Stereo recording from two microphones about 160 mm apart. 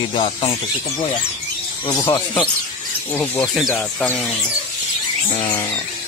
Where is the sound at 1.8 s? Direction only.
15° left (ahead or behind).